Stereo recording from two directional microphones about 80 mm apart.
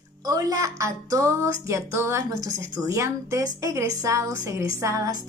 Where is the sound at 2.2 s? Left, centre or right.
Right.